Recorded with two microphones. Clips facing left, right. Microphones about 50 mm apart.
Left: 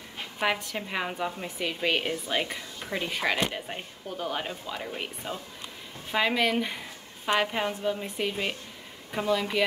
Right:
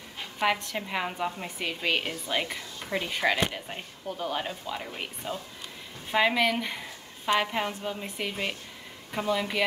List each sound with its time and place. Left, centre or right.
0.4 s a woman's voice: centre